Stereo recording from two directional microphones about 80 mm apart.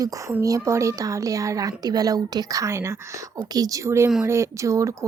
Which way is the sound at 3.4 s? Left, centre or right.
Right.